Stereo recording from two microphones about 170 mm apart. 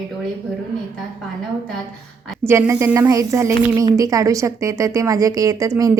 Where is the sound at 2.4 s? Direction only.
15° right (ahead or behind).